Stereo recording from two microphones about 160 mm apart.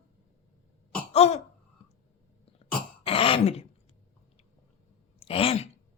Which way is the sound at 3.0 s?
35° left (ahead or behind).